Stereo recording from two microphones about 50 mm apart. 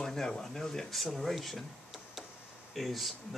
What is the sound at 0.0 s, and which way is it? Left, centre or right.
Speech, centre.